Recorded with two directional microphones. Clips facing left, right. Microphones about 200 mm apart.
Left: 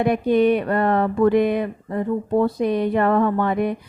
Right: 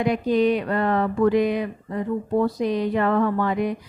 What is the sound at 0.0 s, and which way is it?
A woman's voice, 55° left (ahead or behind).